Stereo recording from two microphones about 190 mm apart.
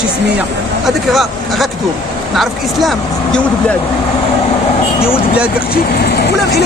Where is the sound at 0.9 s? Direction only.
Centre (ahead or behind).